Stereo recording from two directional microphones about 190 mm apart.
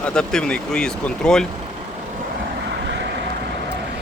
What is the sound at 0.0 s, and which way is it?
Speech, 5° left (ahead or behind).